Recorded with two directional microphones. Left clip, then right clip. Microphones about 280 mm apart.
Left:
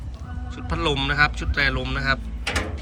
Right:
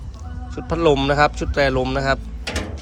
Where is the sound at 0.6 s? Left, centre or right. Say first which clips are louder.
Right 7 dB; centre.